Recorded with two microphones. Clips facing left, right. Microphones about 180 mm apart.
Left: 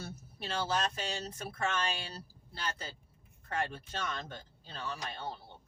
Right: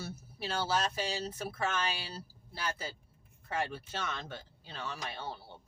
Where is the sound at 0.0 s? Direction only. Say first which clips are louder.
Right 2 dB; 5° right (ahead or behind).